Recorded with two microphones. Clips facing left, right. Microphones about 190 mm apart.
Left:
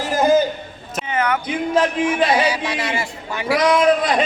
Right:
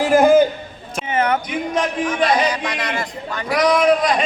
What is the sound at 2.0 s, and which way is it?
A man's voice, 5° left (ahead or behind).